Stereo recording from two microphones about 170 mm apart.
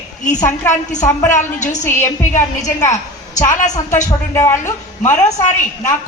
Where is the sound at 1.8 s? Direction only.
15° left (ahead or behind).